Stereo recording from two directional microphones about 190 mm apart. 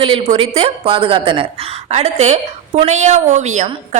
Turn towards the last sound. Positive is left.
turn(degrees=-40)  # may be behind; listen again after turning